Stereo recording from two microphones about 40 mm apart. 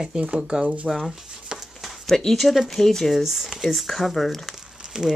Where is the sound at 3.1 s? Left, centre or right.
Centre.